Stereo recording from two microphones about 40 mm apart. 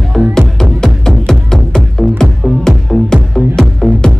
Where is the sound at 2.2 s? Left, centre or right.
Centre.